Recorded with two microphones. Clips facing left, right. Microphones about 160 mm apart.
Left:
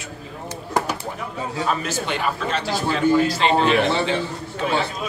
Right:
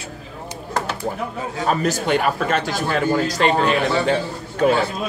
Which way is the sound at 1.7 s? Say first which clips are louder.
Right 8 dB; 40° right (ahead or behind).